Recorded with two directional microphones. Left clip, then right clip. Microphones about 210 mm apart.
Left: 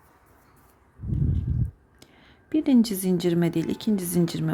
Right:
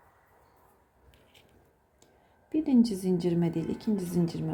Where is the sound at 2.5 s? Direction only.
15° left (ahead or behind).